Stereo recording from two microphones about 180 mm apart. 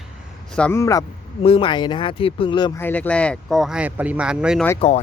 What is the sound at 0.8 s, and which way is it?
Speech, 15° left (ahead or behind).